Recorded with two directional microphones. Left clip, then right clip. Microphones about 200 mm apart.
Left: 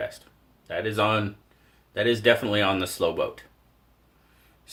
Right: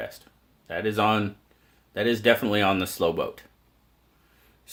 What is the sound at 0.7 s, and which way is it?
Speech, 45° right (ahead or behind).